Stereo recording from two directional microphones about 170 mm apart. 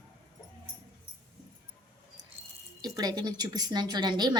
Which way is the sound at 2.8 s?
20° right (ahead or behind).